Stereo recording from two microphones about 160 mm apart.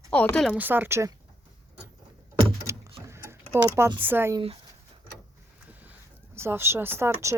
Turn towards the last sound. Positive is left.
turn(degrees=-15)  # may be behind; listen again after turning